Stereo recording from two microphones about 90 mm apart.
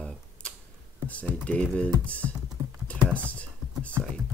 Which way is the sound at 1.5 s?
15° left (ahead or behind).